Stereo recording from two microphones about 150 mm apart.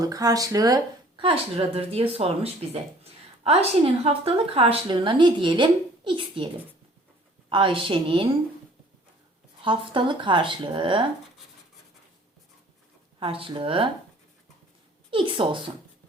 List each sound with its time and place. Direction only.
0.0 s speech: 25° right (ahead or behind)
7.5 s speech: 35° right (ahead or behind)
9.6 s speech: 35° right (ahead or behind)
13.1 s speech: 35° right (ahead or behind)
15.1 s speech: 35° right (ahead or behind)